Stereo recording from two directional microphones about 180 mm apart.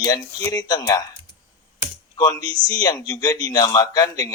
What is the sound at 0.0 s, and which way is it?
A man's voice, 20° left (ahead or behind).